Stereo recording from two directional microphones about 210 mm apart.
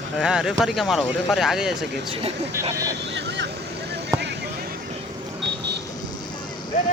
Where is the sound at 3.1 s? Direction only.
55° right (ahead or behind).